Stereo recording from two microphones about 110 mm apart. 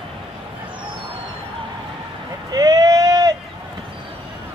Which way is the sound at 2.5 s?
35° right (ahead or behind).